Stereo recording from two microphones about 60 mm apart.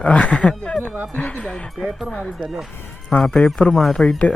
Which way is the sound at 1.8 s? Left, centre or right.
Centre.